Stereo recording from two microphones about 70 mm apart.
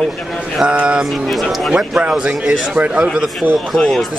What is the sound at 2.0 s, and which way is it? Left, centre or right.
Speech, centre.